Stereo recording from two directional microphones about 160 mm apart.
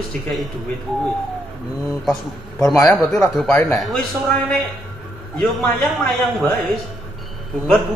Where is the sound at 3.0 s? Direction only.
20° left (ahead or behind).